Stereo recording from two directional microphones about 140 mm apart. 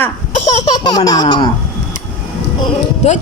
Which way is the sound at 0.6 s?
30° left (ahead or behind).